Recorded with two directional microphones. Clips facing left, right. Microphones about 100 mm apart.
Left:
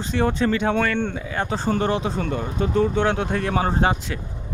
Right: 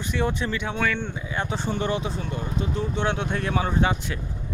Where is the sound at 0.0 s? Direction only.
40° left (ahead or behind).